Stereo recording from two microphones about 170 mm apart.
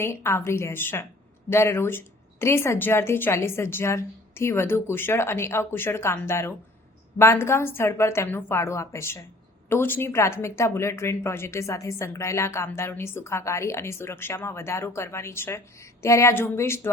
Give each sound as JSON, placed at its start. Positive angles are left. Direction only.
{"t": 0.0, "sound": "speech", "side_deg": 15}